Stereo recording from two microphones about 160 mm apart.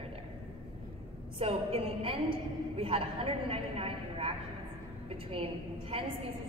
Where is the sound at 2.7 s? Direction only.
35° right (ahead or behind).